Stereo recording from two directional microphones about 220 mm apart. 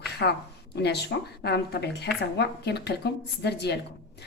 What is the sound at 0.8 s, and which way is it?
A woman's voice, 50° left (ahead or behind).